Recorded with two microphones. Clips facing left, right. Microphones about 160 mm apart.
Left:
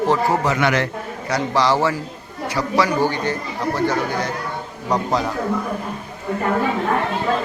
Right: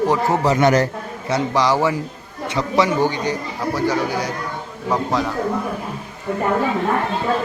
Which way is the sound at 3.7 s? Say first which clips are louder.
Right 1 dB; 10° right (ahead or behind).